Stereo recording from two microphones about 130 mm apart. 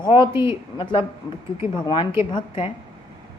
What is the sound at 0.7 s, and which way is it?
A woman's voice, 40° left (ahead or behind).